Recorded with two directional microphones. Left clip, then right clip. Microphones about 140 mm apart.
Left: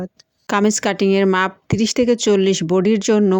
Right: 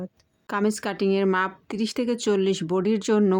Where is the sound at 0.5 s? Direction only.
40° left (ahead or behind).